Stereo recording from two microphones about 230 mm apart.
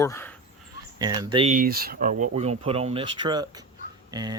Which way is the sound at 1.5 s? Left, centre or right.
Right.